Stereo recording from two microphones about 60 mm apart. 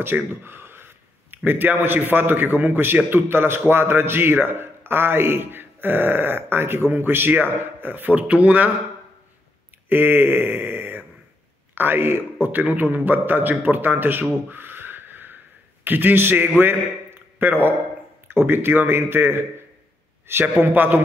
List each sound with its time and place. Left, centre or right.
0.0 s a man's voice: right
9.8 s a man's voice: right
14.5 s a sound: right
16.4 s a man's voice: right